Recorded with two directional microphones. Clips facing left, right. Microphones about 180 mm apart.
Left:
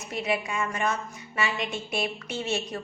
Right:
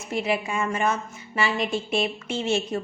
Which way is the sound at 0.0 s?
25° right (ahead or behind).